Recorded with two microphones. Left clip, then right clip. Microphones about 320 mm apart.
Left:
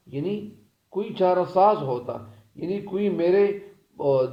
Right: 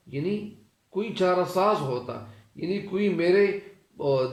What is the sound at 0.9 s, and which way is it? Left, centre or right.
Speech, left.